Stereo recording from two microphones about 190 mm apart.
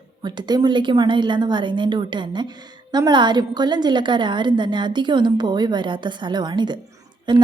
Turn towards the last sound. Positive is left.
turn(degrees=-25)  # may be behind; listen again after turning